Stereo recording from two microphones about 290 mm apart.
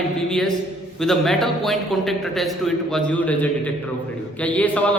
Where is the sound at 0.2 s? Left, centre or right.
Centre.